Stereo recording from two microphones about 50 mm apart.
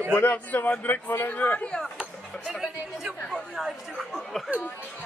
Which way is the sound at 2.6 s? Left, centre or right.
Centre.